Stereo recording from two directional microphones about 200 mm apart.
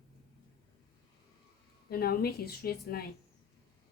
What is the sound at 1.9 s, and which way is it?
A woman's voice, 50° left (ahead or behind).